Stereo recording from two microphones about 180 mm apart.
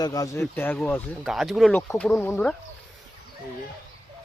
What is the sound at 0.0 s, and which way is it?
Speech, 20° left (ahead or behind).